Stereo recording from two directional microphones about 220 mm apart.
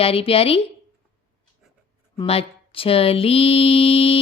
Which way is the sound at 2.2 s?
25° left (ahead or behind).